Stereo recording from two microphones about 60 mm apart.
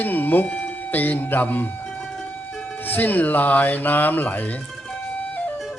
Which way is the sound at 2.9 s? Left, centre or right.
Left.